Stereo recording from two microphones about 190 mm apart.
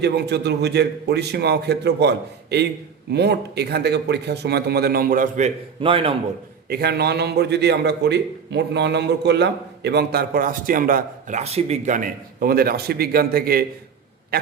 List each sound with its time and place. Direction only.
0.0 s a man's voice: 60° right (ahead or behind); by 5.5 s 45° right (ahead or behind)
5.8 s a man's voice: 30° right (ahead or behind)
6.7 s a man's voice: 55° right (ahead or behind)